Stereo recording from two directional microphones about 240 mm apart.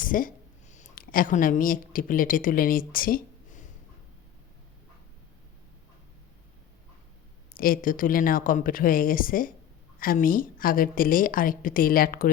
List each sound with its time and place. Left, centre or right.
0.0 s a woman's voice: left
7.5 s a woman's voice: left